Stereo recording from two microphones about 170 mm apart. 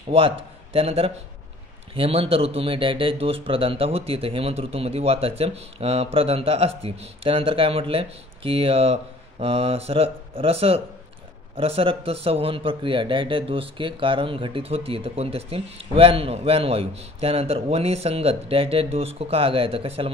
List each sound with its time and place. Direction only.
0.7 s a man's voice: 35° right (ahead or behind)